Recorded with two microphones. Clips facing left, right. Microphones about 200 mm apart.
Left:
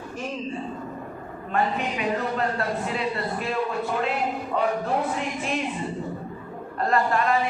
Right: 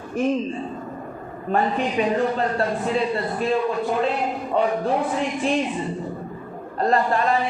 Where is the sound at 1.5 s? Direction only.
30° right (ahead or behind).